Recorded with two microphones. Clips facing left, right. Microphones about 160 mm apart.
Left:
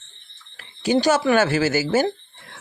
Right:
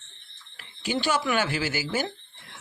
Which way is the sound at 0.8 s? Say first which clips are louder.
Left 8 dB; 40° left (ahead or behind).